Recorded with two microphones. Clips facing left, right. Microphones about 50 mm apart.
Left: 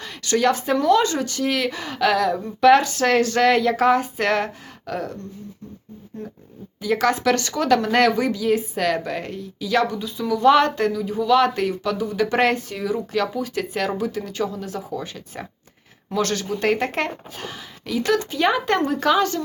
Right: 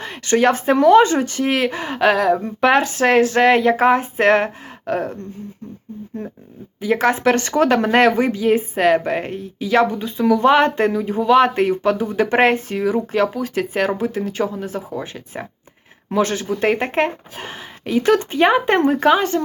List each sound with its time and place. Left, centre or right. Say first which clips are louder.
0.0 s speech: right 4 dB; right
6.8 s speech: right 3 dB; right
17.5 s speech: right 7 dB; right